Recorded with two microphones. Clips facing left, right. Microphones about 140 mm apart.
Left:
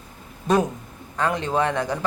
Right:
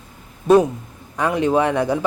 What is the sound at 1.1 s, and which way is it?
Speech, 10° right (ahead or behind).